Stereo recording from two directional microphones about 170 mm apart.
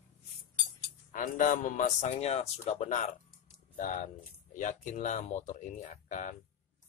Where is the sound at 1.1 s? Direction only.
50° left (ahead or behind).